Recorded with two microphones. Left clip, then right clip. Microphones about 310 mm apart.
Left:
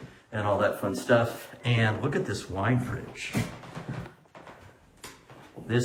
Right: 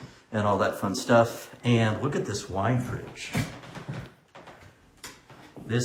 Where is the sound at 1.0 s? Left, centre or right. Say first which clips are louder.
Right 3 dB; centre.